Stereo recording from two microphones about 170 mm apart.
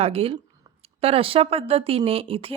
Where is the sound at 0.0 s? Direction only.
35° right (ahead or behind).